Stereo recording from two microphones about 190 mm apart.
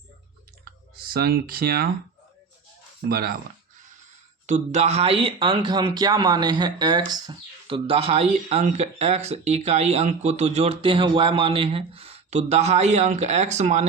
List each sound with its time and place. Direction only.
0.6 s speech: 50° right (ahead or behind)
3.1 s speech: 50° right (ahead or behind)
4.4 s speech: 40° right (ahead or behind)